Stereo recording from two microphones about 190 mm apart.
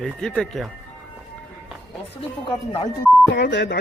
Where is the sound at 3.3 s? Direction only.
65° left (ahead or behind).